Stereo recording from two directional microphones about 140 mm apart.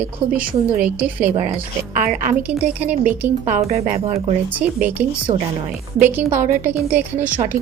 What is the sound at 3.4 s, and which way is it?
Speech, 60° right (ahead or behind).